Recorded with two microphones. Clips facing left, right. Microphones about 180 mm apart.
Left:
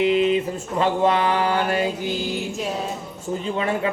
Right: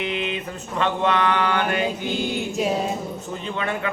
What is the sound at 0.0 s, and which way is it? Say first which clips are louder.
A man's voice: left 9 dB; 30° left (ahead or behind).